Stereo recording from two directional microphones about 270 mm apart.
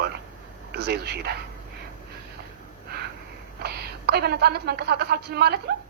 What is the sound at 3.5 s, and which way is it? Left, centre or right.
A woman's voice, right.